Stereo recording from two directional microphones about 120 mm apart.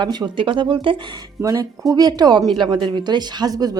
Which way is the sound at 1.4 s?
30° right (ahead or behind).